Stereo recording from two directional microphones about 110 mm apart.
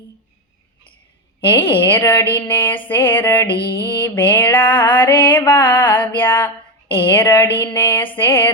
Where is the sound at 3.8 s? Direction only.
20° left (ahead or behind).